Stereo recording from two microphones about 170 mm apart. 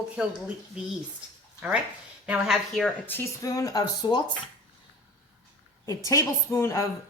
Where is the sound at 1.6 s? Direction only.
5° right (ahead or behind).